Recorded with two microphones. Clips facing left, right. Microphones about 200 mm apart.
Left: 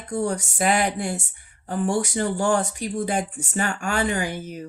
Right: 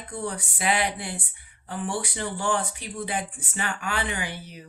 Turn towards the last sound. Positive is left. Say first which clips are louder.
# left 7 dB
turn(degrees=45)  # may be behind; listen again after turning